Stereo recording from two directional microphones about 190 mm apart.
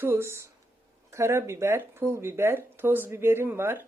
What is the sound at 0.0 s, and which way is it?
Speech, 10° right (ahead or behind).